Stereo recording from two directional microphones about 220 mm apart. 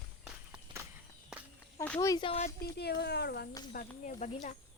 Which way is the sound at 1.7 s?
10° left (ahead or behind).